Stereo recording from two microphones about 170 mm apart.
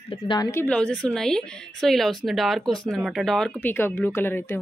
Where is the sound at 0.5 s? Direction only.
10° left (ahead or behind).